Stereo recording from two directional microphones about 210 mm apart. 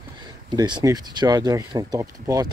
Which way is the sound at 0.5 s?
20° right (ahead or behind).